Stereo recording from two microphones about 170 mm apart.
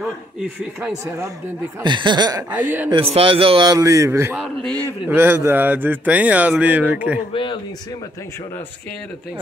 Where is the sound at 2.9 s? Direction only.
35° right (ahead or behind); by 4.4 s 15° right (ahead or behind).